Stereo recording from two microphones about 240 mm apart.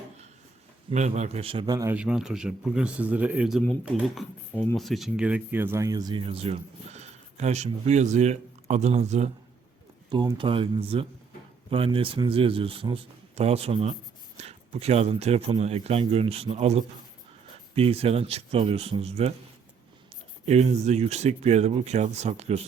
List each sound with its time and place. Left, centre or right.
0.9 s a man's voice: right
20.4 s speech: right